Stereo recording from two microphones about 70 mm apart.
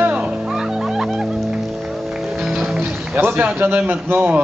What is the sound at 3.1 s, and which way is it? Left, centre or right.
A man's voice, right.